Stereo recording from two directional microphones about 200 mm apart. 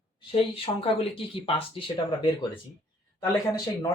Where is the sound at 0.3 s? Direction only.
25° left (ahead or behind).